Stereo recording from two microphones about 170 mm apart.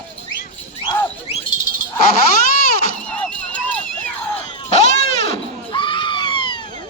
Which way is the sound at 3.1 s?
10° left (ahead or behind).